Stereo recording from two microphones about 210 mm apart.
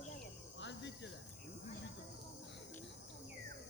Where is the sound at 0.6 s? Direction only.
55° left (ahead or behind).